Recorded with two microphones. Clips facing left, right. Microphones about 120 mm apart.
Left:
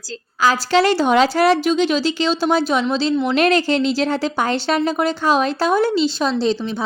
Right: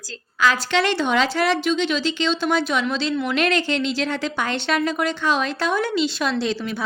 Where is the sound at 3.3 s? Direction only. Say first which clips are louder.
Left 5 dB; 40° left (ahead or behind).